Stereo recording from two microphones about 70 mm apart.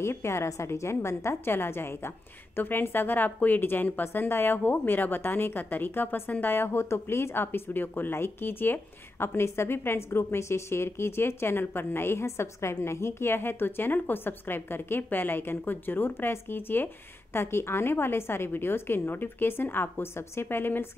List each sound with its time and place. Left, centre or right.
0.0 s speech: left